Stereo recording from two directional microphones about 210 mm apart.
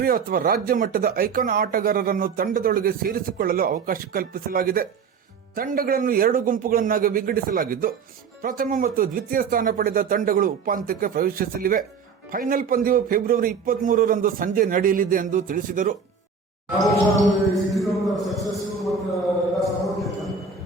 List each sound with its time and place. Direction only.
0.0 s a man's voice: 45° right (ahead or behind)
17.7 s speech: centre (ahead or behind)
19.5 s a sound: centre (ahead or behind)